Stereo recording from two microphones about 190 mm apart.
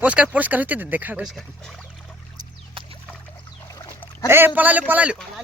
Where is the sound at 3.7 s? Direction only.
20° left (ahead or behind).